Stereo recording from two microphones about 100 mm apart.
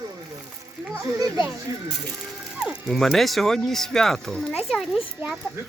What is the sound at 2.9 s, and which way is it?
Speech, centre (ahead or behind).